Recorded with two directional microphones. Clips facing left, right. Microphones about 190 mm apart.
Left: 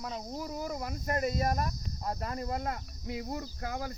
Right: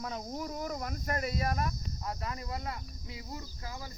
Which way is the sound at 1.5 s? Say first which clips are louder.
Left 1 dB; 40° left (ahead or behind).